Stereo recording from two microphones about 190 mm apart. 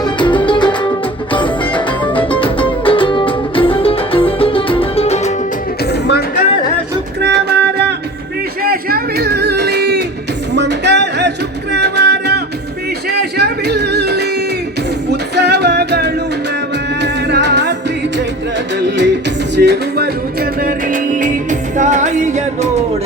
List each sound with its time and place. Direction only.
0.0 s music: 25° left (ahead or behind)
5.8 s music: 60° left (ahead or behind)
7.2 s music: 65° right (ahead or behind)
8.6 s a sound: 50° right (ahead or behind)
10.5 s music: 65° right (ahead or behind)
18.9 s music: 65° right (ahead or behind); by 22.7 s 40° right (ahead or behind)